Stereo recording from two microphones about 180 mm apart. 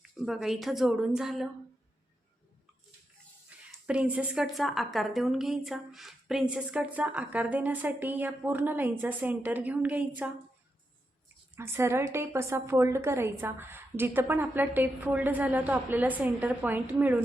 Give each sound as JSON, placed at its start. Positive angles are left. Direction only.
{"t": 0.0, "sound": "a woman's voice", "side_deg": 0}
{"t": 3.5, "sound": "a sound", "side_deg": -5}
{"t": 3.8, "sound": "a woman's voice", "side_deg": -5}
{"t": 11.5, "sound": "a woman's voice", "side_deg": -15}